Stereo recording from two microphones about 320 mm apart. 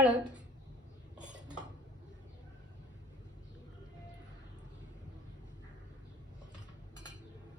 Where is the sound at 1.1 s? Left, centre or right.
Centre.